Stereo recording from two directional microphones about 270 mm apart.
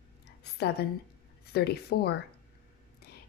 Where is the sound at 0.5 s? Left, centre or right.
Left.